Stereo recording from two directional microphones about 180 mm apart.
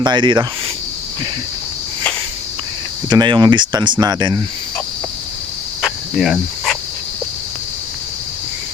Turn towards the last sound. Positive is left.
turn(degrees=0)  # may be behind; listen again after turning